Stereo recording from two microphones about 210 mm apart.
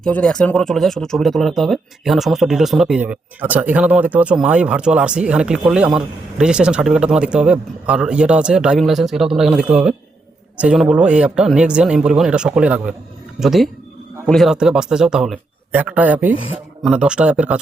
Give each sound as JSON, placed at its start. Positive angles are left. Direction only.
{"t": 0.0, "sound": "speech", "side_deg": 5}